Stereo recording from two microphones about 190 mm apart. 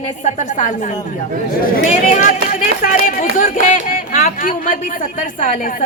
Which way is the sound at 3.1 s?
40° left (ahead or behind).